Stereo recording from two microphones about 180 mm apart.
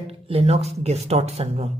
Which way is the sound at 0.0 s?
35° right (ahead or behind).